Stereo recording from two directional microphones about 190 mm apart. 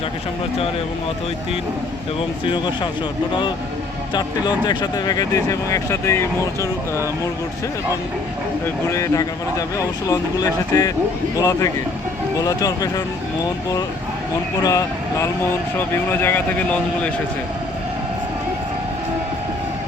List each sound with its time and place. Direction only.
2.4 s speech: 25° left (ahead or behind)
4.1 s speech: 20° left (ahead or behind)
8.6 s speech: 15° left (ahead or behind)
14.6 s speech: 20° left (ahead or behind)